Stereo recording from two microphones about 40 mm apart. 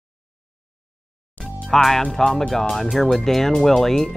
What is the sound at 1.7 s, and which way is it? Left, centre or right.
Speech, centre.